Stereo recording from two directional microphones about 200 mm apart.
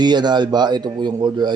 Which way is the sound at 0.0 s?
20° right (ahead or behind).